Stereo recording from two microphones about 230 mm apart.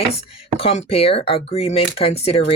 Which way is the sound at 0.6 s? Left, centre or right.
Left.